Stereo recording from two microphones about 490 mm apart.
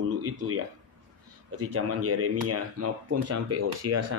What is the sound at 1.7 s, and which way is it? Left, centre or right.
Speech, right.